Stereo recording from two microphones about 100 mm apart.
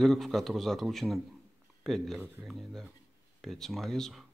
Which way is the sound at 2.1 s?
15° right (ahead or behind).